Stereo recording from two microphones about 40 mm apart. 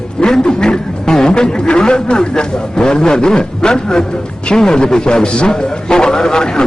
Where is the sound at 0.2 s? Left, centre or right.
Centre.